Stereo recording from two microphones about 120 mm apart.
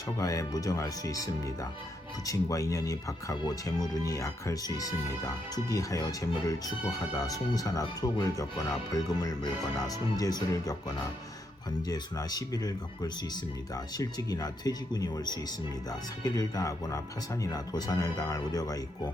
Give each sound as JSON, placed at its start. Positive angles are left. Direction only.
{"t": 0.2, "sound": "speech", "side_deg": 30}